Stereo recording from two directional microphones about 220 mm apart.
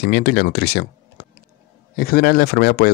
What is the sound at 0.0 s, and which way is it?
Speech, 45° left (ahead or behind).